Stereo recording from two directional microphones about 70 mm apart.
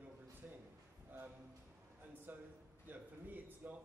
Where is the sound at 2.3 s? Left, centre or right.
Right.